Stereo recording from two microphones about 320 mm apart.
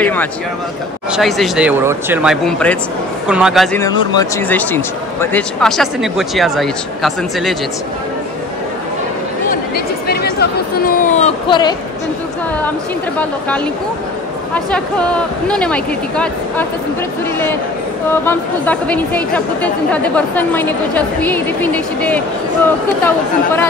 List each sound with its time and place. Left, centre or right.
0.0 s a man's voice: centre
9.5 s speech: left
14.5 s a man's voice: centre
18.2 s a man's voice: centre